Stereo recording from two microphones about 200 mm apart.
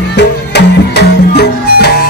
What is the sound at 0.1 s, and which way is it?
Music, 55° left (ahead or behind).